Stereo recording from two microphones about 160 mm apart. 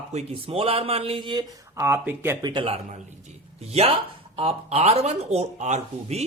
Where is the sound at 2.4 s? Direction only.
35° right (ahead or behind).